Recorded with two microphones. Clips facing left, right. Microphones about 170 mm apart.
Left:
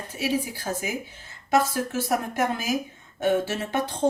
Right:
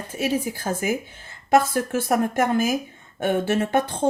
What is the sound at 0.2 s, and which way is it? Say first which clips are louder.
A woman's voice: right 3 dB; 50° right (ahead or behind).